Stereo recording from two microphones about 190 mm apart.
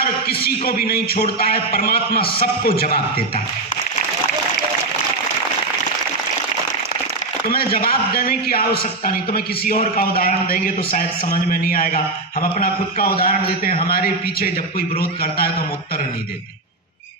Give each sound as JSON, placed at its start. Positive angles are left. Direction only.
{"t": 0.0, "sound": "a man's voice", "side_deg": 55}
{"t": 7.4, "sound": "a man's voice", "side_deg": 50}